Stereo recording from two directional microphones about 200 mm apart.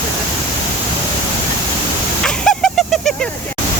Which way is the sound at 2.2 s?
5° left (ahead or behind).